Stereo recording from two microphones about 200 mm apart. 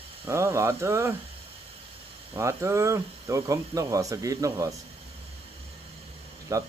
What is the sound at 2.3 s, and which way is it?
Speech, 15° right (ahead or behind).